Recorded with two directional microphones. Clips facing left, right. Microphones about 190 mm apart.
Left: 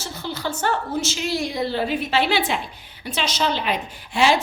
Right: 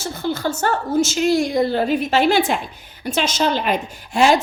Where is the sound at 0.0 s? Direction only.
50° right (ahead or behind).